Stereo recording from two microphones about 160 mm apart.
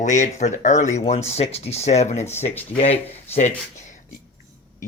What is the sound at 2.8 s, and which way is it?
Speech, 40° left (ahead or behind).